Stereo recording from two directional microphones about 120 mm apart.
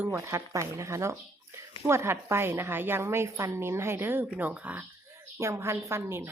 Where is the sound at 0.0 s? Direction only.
20° right (ahead or behind).